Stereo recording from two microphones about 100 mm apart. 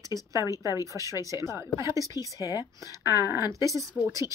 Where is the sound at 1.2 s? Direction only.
30° right (ahead or behind).